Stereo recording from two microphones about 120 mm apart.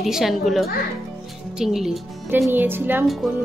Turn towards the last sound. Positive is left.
turn(degrees=-15)  # may be behind; listen again after turning